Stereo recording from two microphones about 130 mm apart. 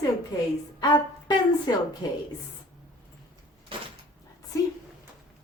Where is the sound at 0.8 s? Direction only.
35° left (ahead or behind).